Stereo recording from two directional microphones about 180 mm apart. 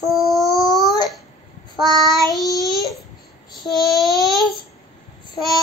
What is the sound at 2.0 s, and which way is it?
A woman's voice, centre (ahead or behind).